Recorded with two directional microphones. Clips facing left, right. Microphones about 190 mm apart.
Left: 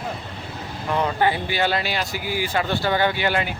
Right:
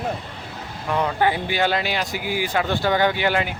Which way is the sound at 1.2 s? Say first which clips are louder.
Right 1 dB; 15° right (ahead or behind).